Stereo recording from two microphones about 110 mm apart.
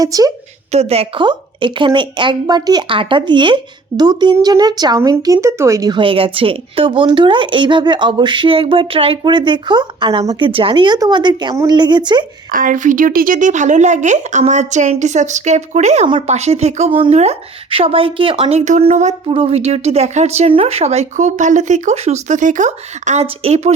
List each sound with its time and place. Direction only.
0.0 s a woman's voice: 35° right (ahead or behind)
0.7 s a woman's voice: 70° right (ahead or behind)
1.2 s speech: 45° right (ahead or behind)
2.9 s a woman's voice: 50° right (ahead or behind)
4.9 s speech: 25° right (ahead or behind)
5.9 s a woman's voice: 50° right (ahead or behind)
12.8 s speech: 90° right
17.7 s a woman's voice: 55° right (ahead or behind); by 20.5 s 85° right
20.5 s speech: 60° right (ahead or behind)